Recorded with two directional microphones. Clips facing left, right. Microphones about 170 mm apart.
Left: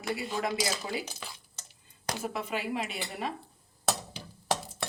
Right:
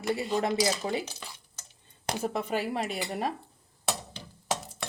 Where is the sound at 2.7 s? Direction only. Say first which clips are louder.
Right 3 dB; 40° right (ahead or behind).